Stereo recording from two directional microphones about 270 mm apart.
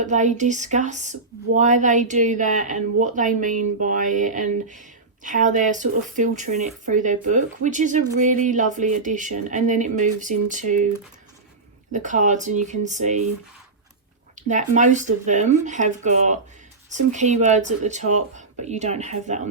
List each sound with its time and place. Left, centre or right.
0.0 s speech: right
11.9 s speech: right
14.3 s speech: right